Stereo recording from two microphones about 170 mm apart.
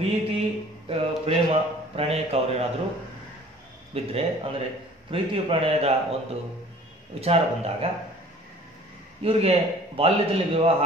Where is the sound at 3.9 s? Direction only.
35° right (ahead or behind).